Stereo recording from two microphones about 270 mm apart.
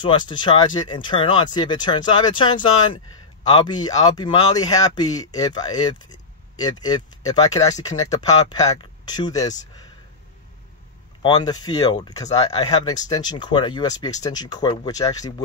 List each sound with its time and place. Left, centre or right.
0.0 s speech: centre
11.2 s speech: centre